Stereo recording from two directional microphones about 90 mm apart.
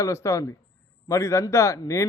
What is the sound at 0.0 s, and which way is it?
A man's voice, 35° left (ahead or behind).